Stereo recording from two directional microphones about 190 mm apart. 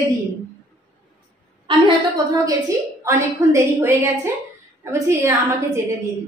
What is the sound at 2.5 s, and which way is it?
A woman's voice, 15° right (ahead or behind).